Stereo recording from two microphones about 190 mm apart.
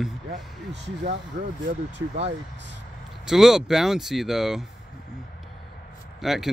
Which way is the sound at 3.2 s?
5° right (ahead or behind).